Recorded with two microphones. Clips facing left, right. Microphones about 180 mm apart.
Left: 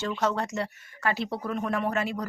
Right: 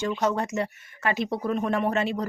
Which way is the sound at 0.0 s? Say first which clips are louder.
Right 2 dB; 20° right (ahead or behind).